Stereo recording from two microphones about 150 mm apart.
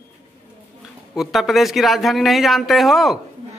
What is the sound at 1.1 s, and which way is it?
Speech, centre (ahead or behind).